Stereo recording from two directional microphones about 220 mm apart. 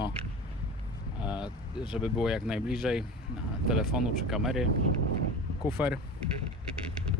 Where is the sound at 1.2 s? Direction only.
5° right (ahead or behind).